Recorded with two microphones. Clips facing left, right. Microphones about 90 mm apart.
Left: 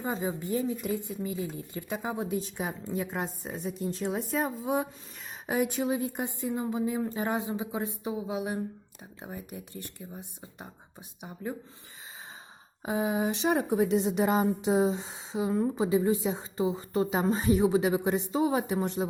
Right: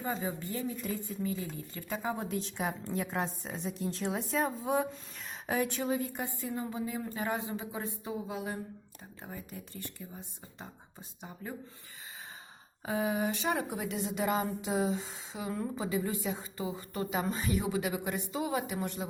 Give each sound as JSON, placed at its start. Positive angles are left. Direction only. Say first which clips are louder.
{"t": 0.0, "sound": "a woman's voice", "louder": "left 3 dB", "side_deg": 20}
{"t": 2.4, "sound": "a woman's voice", "louder": "left 1 dB", "side_deg": 0}
{"t": 12.8, "sound": "speech", "louder": "left 3 dB", "side_deg": 20}